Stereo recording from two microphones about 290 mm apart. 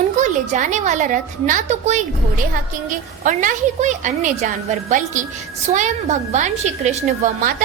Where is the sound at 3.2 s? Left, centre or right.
Right.